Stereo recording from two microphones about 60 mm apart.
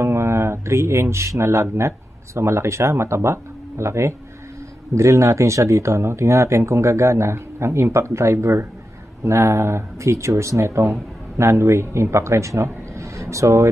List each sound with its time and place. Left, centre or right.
0.0 s a man's voice: right